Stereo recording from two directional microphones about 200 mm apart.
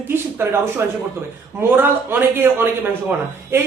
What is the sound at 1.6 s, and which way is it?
Speech, 10° right (ahead or behind).